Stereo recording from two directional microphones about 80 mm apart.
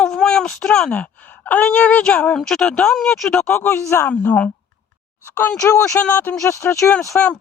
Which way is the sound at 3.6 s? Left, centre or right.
Left.